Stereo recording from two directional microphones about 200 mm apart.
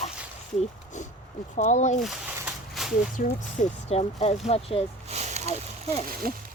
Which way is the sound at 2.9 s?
40° left (ahead or behind).